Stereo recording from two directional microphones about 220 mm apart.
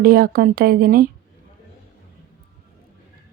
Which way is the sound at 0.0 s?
40° right (ahead or behind).